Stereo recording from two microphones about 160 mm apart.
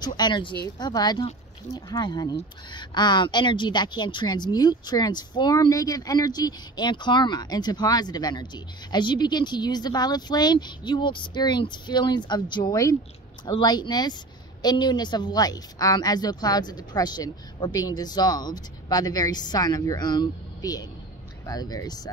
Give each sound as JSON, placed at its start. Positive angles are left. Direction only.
{"t": 0.0, "sound": "a woman's voice", "side_deg": 30}